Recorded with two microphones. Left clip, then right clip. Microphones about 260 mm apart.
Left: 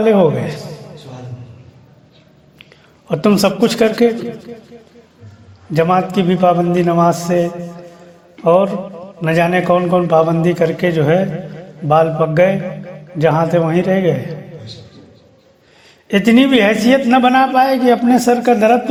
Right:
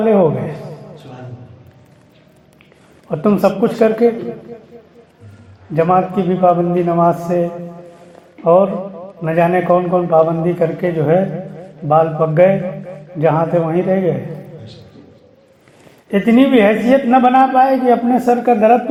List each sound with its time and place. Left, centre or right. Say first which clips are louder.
0.0 s a man's voice: left 1 dB; left
3.1 s a man's voice: even; left
5.7 s a man's voice: even; left
16.0 s a man's voice: left 1 dB; left